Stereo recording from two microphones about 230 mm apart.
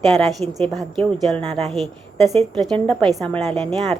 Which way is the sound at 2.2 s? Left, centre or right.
Right.